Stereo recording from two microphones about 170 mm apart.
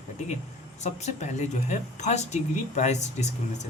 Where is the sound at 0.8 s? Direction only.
40° left (ahead or behind).